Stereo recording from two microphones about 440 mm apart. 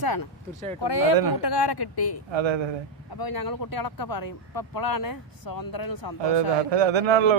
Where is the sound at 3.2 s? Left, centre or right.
Left.